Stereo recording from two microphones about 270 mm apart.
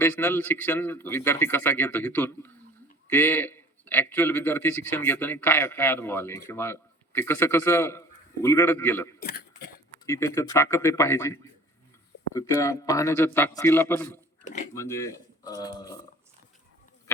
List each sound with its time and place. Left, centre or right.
0.0 s a man's voice: centre
9.2 s throat clearing: left
10.1 s a man's voice: centre